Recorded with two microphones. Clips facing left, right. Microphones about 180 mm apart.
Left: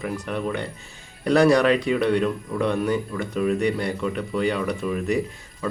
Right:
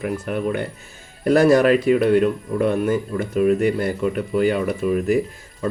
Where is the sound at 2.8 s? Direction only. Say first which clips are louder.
Right 3 dB; 45° right (ahead or behind).